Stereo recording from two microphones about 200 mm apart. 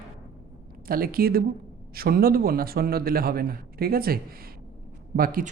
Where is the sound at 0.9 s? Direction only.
45° right (ahead or behind).